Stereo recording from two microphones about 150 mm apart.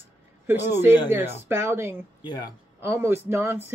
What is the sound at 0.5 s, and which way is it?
Speech, 15° right (ahead or behind).